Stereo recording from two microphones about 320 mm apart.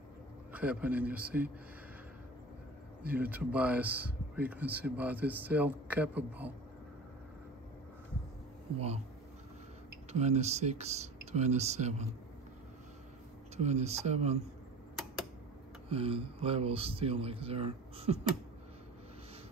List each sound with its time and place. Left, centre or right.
0.5 s speech: centre
3.2 s speech: centre
8.7 s speech: centre
10.1 s speech: centre
13.6 s speech: centre
15.9 s a man's voice: centre